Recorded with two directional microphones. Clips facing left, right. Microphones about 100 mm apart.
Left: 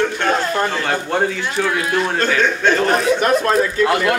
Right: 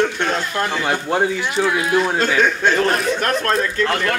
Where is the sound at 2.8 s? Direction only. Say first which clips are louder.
Left 3 dB; 5° left (ahead or behind).